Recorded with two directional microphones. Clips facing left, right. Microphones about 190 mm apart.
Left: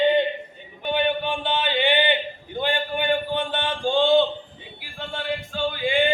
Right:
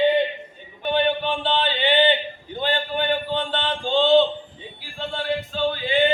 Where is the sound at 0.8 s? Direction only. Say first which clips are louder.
Right 2 dB; 15° left (ahead or behind).